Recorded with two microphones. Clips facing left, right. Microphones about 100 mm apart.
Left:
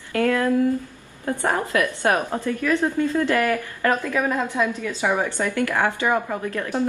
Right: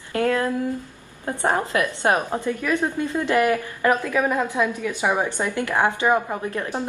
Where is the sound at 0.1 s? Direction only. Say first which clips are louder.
Left 1 dB; 25° right (ahead or behind).